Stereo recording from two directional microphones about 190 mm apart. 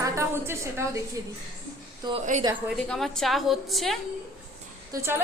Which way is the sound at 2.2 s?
40° right (ahead or behind).